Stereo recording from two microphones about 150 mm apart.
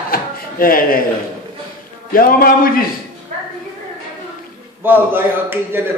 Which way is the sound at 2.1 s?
70° left (ahead or behind).